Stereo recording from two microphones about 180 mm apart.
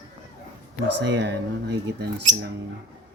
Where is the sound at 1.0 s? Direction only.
75° right (ahead or behind).